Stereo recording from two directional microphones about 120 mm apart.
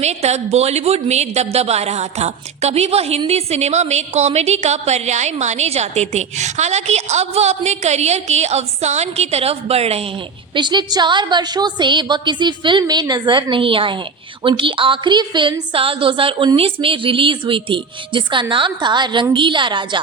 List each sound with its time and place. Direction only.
0.0 s a woman's voice: 65° right (ahead or behind)
10.5 s a woman's voice: 40° right (ahead or behind)